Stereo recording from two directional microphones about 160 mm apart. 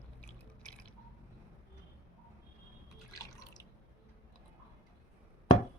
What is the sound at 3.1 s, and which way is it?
Drip, 25° left (ahead or behind).